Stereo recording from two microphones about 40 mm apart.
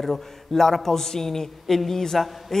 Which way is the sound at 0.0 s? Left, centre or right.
Centre.